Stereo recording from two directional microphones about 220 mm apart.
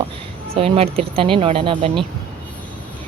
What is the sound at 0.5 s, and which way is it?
Speech, 25° right (ahead or behind).